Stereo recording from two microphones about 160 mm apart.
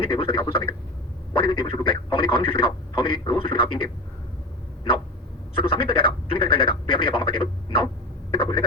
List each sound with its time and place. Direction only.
0.0 s a man's voice: 35° left (ahead or behind)
5.5 s a man's voice: 35° left (ahead or behind)
8.3 s a sound: 35° left (ahead or behind)